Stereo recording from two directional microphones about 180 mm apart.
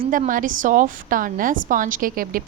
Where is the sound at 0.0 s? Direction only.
50° right (ahead or behind).